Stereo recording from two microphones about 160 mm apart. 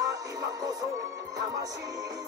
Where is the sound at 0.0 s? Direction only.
25° right (ahead or behind).